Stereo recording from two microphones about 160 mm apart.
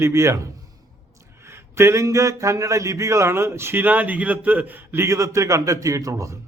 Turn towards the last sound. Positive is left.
turn(degrees=-20)  # may be behind; listen again after turning